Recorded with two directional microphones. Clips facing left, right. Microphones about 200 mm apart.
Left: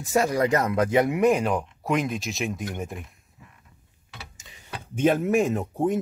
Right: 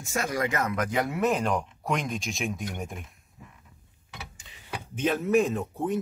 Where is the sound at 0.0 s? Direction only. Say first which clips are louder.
Left 7 dB; 35° left (ahead or behind).